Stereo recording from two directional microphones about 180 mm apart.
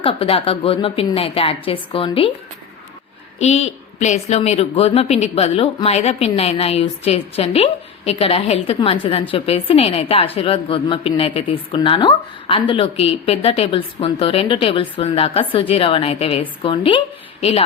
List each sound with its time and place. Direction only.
0.0 s a woman's voice: 30° left (ahead or behind)
3.3 s a woman's voice: 35° left (ahead or behind)